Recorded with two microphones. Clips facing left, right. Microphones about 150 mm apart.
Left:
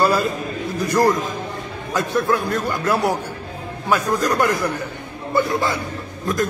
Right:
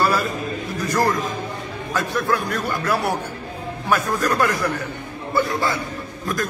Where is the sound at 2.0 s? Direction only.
20° left (ahead or behind).